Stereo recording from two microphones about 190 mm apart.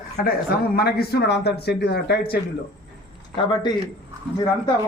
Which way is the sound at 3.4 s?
25° left (ahead or behind).